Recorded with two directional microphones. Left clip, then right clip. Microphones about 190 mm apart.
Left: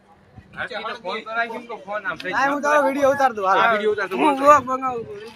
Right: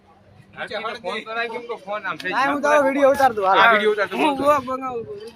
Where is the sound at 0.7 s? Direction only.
60° right (ahead or behind).